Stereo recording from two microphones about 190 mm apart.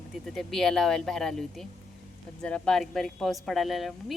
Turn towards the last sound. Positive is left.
turn(degrees=0)  # may be behind; listen again after turning